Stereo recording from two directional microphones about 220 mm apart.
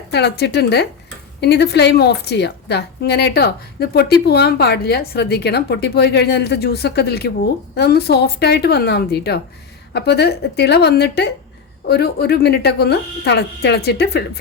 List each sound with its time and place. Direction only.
0.1 s a woman's voice: 50° left (ahead or behind)